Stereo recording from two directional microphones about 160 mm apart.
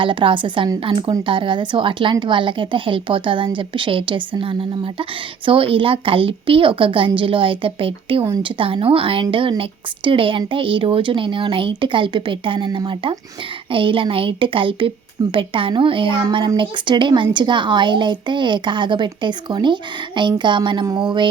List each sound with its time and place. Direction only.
0.0 s a woman's voice: 30° right (ahead or behind)